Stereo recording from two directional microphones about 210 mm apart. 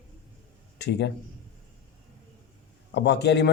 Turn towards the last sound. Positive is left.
turn(degrees=55)  # may be behind; listen again after turning